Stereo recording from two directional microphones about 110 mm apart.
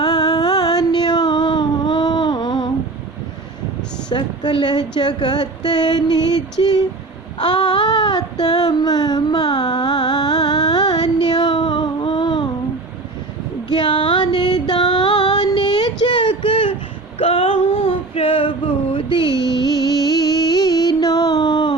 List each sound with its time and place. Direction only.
0.0 s a sound: 35° left (ahead or behind)
4.1 s a woman's voice: 45° left (ahead or behind)
7.4 s child singing: 45° left (ahead or behind)
13.7 s female singing: 45° left (ahead or behind)
17.2 s a sound: 60° left (ahead or behind)
18.9 s music: 45° left (ahead or behind)